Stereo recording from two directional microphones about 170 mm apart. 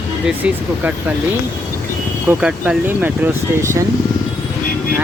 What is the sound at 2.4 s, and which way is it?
Speech, 5° right (ahead or behind).